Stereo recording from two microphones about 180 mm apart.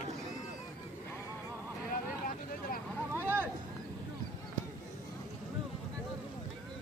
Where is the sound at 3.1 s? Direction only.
15° right (ahead or behind).